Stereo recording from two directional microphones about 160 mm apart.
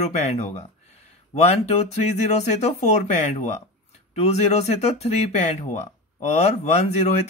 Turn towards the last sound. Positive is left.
turn(degrees=40)  # may be behind; listen again after turning